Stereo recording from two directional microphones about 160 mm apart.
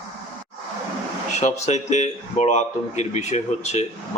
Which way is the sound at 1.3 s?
45° left (ahead or behind).